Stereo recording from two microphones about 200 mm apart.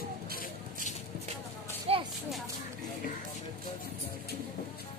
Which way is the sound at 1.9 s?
30° right (ahead or behind).